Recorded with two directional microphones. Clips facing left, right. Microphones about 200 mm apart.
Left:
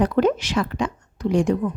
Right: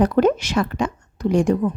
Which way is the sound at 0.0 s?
45° right (ahead or behind).